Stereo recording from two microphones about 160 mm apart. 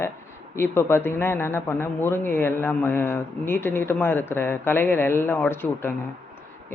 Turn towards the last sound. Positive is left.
turn(degrees=10)  # may be behind; listen again after turning